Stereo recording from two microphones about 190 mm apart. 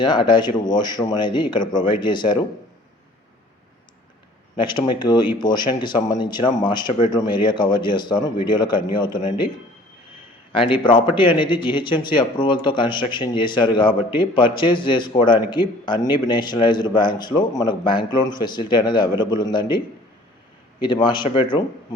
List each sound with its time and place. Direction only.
0.0 s a man's voice: 25° left (ahead or behind)
4.5 s a man's voice: 25° left (ahead or behind)
10.5 s a man's voice: 25° left (ahead or behind)
20.8 s a man's voice: 25° left (ahead or behind)